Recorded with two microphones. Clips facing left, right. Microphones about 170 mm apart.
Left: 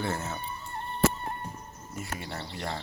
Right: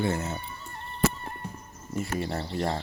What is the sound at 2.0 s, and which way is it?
Speech, 35° right (ahead or behind).